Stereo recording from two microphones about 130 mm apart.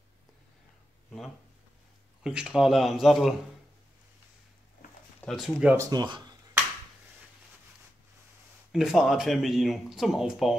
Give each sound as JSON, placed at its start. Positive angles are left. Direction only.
{"t": 2.2, "sound": "speech", "side_deg": -5}
{"t": 5.2, "sound": "speech", "side_deg": 5}
{"t": 5.8, "sound": "speech", "side_deg": -30}
{"t": 8.7, "sound": "speech", "side_deg": -5}